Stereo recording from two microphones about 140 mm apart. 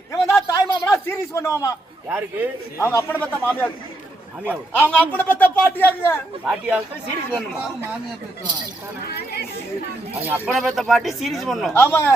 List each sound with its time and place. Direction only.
0.1 s a sound: 20° left (ahead or behind)
2.0 s a man's voice: 15° right (ahead or behind)
2.7 s a man's voice: 20° left (ahead or behind)
4.7 s a man's voice: 10° left (ahead or behind)
6.4 s a man's voice: 5° right (ahead or behind)
10.2 s speech: 5° right (ahead or behind)
11.7 s a man's voice: 15° left (ahead or behind)